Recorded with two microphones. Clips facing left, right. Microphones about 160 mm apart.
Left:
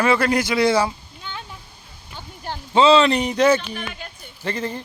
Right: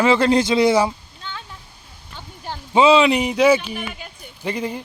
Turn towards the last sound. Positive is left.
turn(degrees=-10)  # may be behind; listen again after turning